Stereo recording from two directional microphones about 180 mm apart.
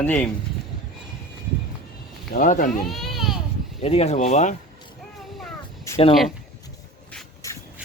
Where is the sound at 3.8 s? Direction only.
35° left (ahead or behind).